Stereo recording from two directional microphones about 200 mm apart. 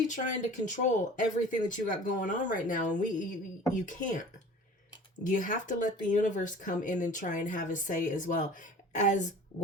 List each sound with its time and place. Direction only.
0.1 s speech: 40° left (ahead or behind)